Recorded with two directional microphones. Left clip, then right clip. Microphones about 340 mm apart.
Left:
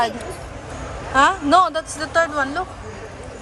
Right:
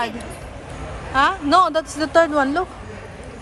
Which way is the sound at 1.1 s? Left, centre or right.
Centre.